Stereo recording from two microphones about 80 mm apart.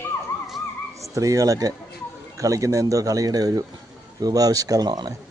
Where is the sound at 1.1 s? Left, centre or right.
Right.